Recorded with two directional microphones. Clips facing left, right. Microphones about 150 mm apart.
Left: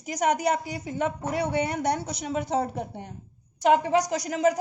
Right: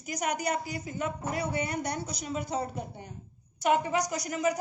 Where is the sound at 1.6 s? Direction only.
90° left.